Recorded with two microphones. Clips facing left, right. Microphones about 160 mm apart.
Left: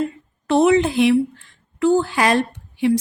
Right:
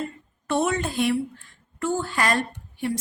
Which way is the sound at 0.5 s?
75° left (ahead or behind).